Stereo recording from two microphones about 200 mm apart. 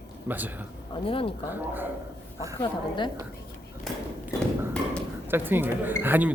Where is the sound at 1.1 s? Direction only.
25° left (ahead or behind).